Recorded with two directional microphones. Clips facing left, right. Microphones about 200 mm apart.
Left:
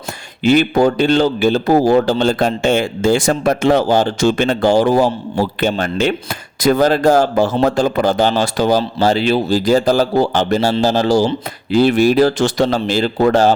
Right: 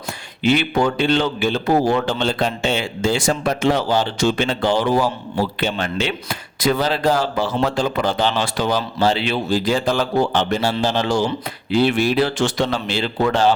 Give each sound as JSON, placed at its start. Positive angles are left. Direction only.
{"t": 0.4, "sound": "a man's voice", "side_deg": 40}